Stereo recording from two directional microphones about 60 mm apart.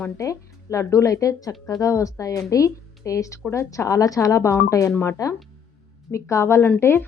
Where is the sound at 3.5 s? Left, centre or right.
Left.